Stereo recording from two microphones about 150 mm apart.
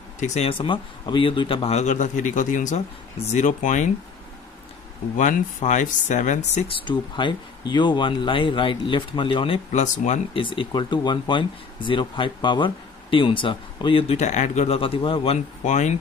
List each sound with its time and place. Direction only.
0.2 s a man's voice: 50° left (ahead or behind)
0.5 s a man's voice: 35° left (ahead or behind); by 3.9 s 55° left (ahead or behind)
5.1 s speech: 55° left (ahead or behind)
6.7 s speech: 35° left (ahead or behind)
9.7 s a man's voice: 50° left (ahead or behind)
10.3 s speech: 35° left (ahead or behind); by 14.8 s 50° left (ahead or behind)
14.8 s speech: 35° left (ahead or behind)
15.6 s a man's voice: 50° left (ahead or behind)